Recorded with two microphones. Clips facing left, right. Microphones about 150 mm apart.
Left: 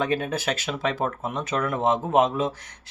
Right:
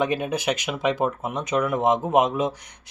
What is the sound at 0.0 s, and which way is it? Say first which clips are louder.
Speech: right 2 dB; 15° right (ahead or behind).